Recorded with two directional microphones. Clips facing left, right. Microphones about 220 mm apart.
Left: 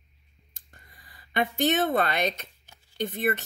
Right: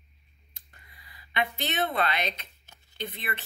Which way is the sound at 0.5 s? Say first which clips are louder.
Left 2 dB; 45° left (ahead or behind).